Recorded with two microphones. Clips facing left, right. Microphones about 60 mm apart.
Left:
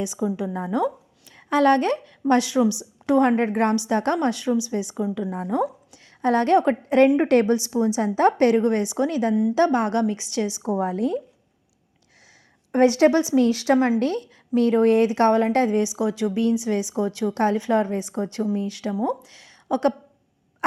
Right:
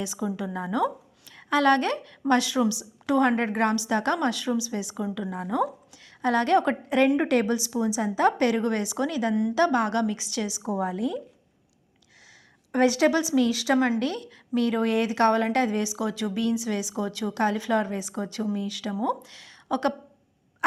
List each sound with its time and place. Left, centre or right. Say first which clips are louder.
0.0 s a woman's voice: left 5 dB; left
7.3 s a woman's voice: left 5 dB; left
12.7 s a woman's voice: left 4 dB; left
18.9 s a woman's voice: left 2 dB; centre